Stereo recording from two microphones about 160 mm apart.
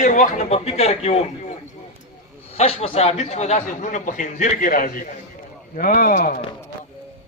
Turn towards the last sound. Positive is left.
turn(degrees=60)  # may be behind; listen again after turning